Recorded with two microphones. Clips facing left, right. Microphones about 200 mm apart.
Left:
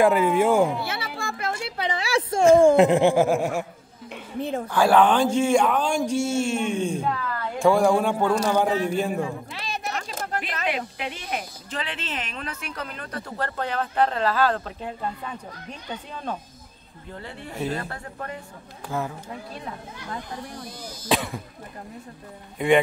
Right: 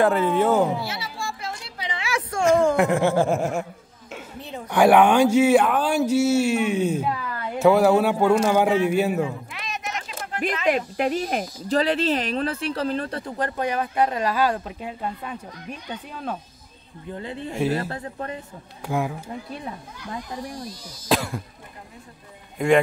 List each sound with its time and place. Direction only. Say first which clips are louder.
0.0 s speech: left 1 dB; 10° left (ahead or behind)
0.7 s a sound: even; 60° left (ahead or behind)
2.0 s speech: left 3 dB; 30° left (ahead or behind); by 3.3 s 15° left (ahead or behind)
3.3 s laughter: even; centre (ahead or behind)
4.4 s a woman's voice: left 10 dB; 50° left (ahead or behind)
4.6 s speech: right 3 dB; 15° right (ahead or behind)
9.5 s a sound: left 1 dB; 30° left (ahead or behind)
10.4 s speech: right 11 dB; 45° right (ahead or behind)
13.4 s speech: right 3 dB; 15° right (ahead or behind)
17.1 s speech: right 6 dB; 20° right (ahead or behind)
18.9 s speech: right 4 dB; 10° right (ahead or behind)
21.1 s laughter: right 2 dB; centre (ahead or behind)
22.6 s laughter: right 1 dB; centre (ahead or behind)